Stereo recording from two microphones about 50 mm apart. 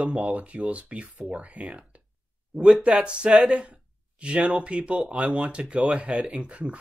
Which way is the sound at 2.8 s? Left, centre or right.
Right.